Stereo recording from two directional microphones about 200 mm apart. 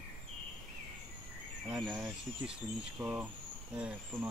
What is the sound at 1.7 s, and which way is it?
Speech, 5° right (ahead or behind).